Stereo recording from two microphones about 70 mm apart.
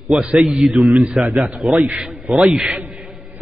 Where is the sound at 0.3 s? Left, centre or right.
Centre.